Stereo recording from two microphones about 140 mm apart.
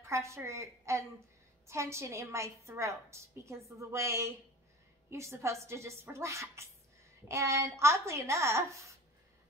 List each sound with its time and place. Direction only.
0.0 s a woman's voice: 20° right (ahead or behind)